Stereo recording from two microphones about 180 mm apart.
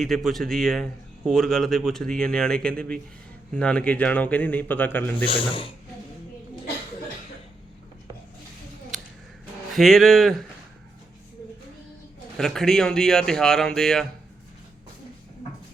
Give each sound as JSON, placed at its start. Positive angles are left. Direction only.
{"t": 0.0, "sound": "a man's voice", "side_deg": 0}
{"t": 5.2, "sound": "speech", "side_deg": 30}
{"t": 9.7, "sound": "a man's voice", "side_deg": 0}
{"t": 12.4, "sound": "a man's voice", "side_deg": 0}